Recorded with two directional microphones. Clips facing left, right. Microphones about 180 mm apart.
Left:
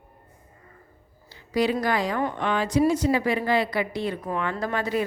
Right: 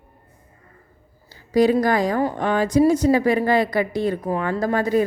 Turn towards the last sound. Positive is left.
turn(degrees=-40)  # may be behind; listen again after turning